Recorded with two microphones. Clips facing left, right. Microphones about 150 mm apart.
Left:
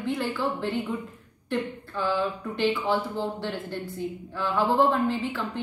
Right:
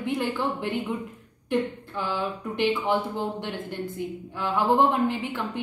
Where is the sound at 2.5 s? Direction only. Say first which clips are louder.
Right 2 dB; 15° right (ahead or behind).